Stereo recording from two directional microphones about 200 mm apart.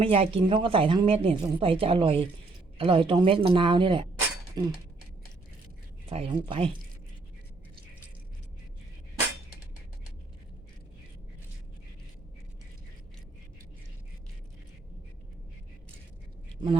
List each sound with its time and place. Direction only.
0.0 s a woman's voice: 30° right (ahead or behind)
6.1 s a woman's voice: 25° right (ahead or behind)